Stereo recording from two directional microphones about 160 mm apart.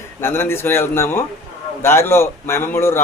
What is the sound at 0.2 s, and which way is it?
A man's voice, 15° left (ahead or behind).